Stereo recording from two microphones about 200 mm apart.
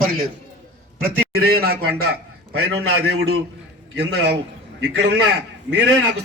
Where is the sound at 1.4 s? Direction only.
50° right (ahead or behind).